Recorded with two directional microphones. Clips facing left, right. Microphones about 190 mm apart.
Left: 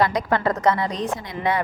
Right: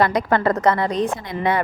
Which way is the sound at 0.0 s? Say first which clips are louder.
Right 3 dB; 55° right (ahead or behind).